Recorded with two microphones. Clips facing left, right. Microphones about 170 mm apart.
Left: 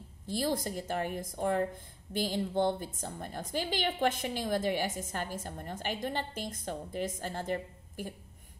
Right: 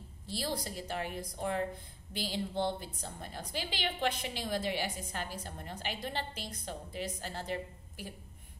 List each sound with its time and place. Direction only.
0.3 s a woman's voice: 50° left (ahead or behind)